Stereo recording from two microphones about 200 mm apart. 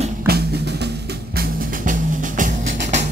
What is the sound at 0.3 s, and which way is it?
Drum, 50° right (ahead or behind).